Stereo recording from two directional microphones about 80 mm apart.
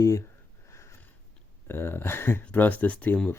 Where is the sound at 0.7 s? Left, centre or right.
Left.